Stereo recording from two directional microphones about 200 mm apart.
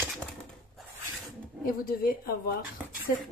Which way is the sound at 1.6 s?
45° left (ahead or behind).